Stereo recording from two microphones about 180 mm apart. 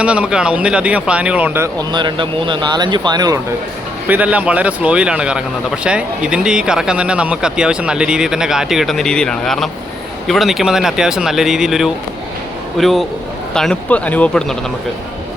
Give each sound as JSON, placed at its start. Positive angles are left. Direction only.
{"t": 0.0, "sound": "speech", "side_deg": -5}
{"t": 1.9, "sound": "speech", "side_deg": -25}
{"t": 4.1, "sound": "speech", "side_deg": -10}